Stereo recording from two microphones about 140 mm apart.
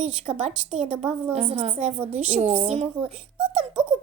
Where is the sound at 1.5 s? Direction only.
55° right (ahead or behind).